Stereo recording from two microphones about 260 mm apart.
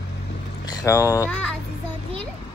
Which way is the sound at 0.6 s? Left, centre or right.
Centre.